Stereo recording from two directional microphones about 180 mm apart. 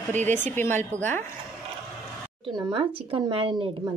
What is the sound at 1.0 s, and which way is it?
Speech, 10° left (ahead or behind).